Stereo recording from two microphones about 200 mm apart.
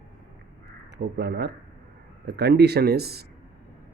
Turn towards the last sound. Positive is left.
turn(degrees=-50)  # may be behind; listen again after turning